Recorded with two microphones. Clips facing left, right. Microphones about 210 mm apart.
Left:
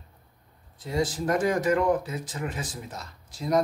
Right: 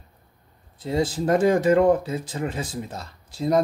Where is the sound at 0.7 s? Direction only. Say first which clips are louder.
Right 4 dB; 25° right (ahead or behind).